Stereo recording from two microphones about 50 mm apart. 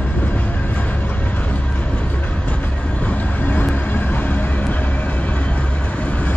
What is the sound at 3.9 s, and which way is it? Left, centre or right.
Vehicle, left.